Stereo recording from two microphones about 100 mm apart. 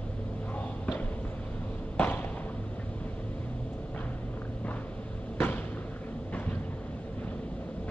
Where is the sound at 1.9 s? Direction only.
20° left (ahead or behind).